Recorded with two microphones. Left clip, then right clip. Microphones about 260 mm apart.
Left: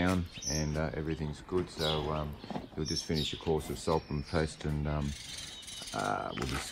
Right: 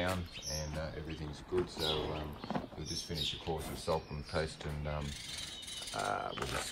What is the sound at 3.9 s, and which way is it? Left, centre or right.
Speech, left.